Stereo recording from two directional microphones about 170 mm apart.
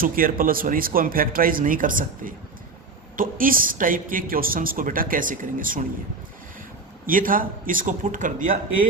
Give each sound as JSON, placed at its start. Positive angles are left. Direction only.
{"t": 0.0, "sound": "speech", "side_deg": -55}
{"t": 7.1, "sound": "speech", "side_deg": -55}